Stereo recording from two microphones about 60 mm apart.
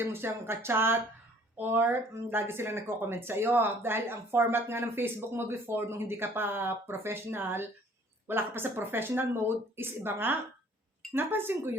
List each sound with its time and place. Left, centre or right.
0.0 s speech: right